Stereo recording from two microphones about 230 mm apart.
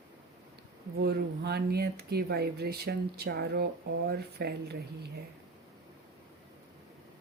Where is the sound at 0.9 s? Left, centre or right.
Right.